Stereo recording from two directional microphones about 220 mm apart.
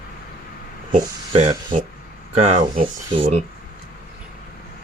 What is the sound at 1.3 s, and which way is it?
Speech, 30° right (ahead or behind).